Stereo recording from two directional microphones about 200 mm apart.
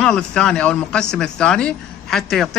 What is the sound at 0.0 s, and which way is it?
Speech, 5° left (ahead or behind).